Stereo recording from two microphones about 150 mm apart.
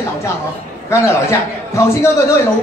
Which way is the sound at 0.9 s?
20° left (ahead or behind).